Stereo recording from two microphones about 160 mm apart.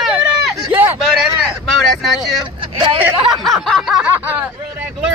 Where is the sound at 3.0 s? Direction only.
10° right (ahead or behind).